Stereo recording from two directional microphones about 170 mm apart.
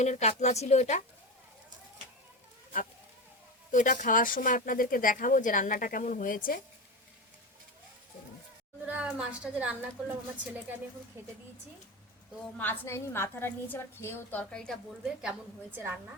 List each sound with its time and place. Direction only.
0.0 s a woman's voice: 40° left (ahead or behind)
3.7 s speech: 50° left (ahead or behind)
8.9 s a woman's voice: 5° right (ahead or behind)
12.4 s a woman's voice: 10° left (ahead or behind); by 16.0 s 10° right (ahead or behind)